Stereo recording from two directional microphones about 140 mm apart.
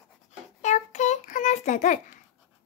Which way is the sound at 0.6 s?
55° left (ahead or behind).